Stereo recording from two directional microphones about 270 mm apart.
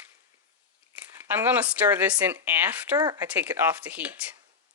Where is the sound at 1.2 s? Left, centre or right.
Centre.